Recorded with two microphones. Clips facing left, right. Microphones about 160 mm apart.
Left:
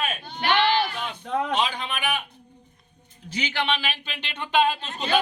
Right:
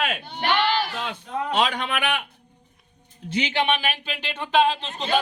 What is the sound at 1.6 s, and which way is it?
Speech, 75° right (ahead or behind).